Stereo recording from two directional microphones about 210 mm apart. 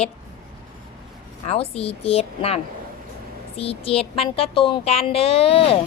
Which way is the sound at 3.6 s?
25° left (ahead or behind).